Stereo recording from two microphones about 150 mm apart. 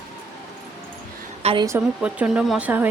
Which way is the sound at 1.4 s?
35° right (ahead or behind).